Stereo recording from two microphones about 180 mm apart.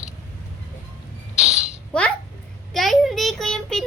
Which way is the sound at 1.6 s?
5° left (ahead or behind).